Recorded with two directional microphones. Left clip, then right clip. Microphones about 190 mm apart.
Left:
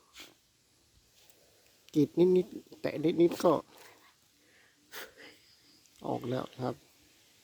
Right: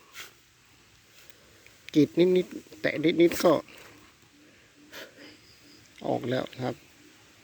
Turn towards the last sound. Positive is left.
turn(degrees=10)  # may be behind; listen again after turning